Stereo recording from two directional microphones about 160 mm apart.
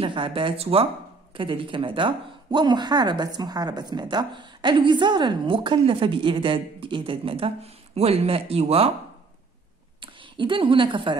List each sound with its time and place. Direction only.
0.0 s speech: 35° right (ahead or behind)
10.3 s speech: 30° right (ahead or behind)